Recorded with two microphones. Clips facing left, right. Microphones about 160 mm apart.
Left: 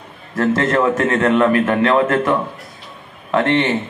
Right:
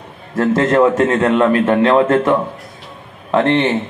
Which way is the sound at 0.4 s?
15° right (ahead or behind).